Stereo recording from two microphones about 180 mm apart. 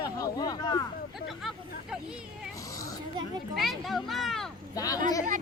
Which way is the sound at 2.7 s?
20° left (ahead or behind).